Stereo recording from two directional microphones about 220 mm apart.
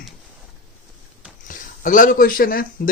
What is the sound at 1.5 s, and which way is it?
Speech, 40° left (ahead or behind).